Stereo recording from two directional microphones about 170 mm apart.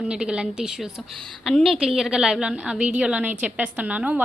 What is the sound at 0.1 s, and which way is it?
A woman's voice, 5° right (ahead or behind).